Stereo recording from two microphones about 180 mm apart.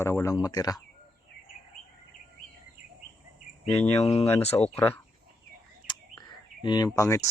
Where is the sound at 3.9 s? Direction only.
35° left (ahead or behind).